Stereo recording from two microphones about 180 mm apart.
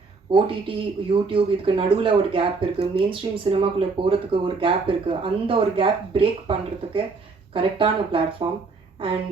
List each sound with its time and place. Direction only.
0.3 s speech: 30° right (ahead or behind)